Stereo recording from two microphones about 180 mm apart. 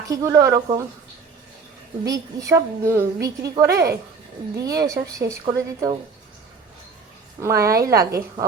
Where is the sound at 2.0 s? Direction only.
20° right (ahead or behind).